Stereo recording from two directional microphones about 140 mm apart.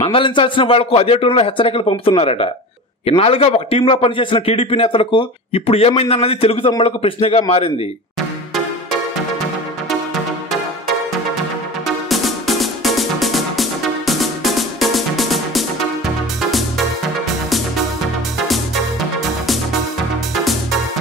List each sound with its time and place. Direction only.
0.0 s a man's voice: 40° left (ahead or behind)
11.8 s music: centre (ahead or behind)